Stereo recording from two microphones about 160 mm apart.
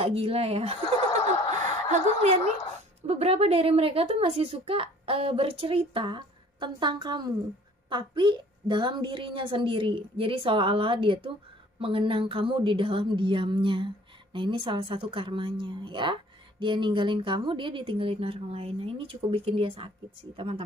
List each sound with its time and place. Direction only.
0.0 s a woman's voice: 35° right (ahead or behind)
1.9 s a woman's voice: 45° right (ahead or behind)